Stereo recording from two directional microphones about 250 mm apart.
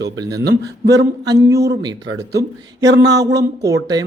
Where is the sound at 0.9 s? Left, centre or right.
Centre.